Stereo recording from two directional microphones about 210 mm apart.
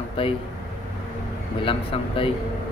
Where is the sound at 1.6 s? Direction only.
25° left (ahead or behind).